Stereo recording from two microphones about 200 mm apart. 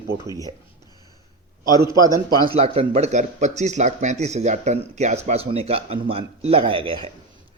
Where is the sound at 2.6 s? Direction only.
30° right (ahead or behind).